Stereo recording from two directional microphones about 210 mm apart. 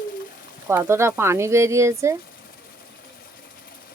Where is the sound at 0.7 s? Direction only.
10° right (ahead or behind).